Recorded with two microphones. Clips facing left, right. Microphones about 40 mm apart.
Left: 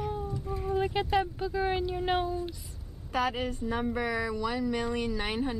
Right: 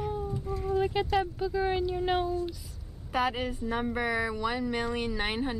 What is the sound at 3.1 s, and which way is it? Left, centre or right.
A woman's voice, centre.